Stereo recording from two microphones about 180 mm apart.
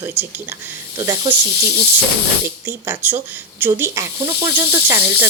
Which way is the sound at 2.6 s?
10° right (ahead or behind).